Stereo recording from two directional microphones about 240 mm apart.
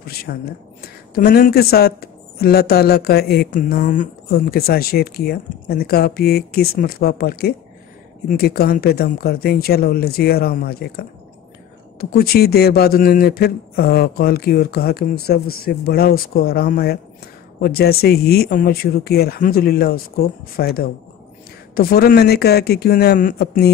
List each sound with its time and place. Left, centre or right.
0.0 s speech: left